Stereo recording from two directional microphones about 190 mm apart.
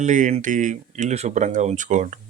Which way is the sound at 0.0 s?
40° right (ahead or behind).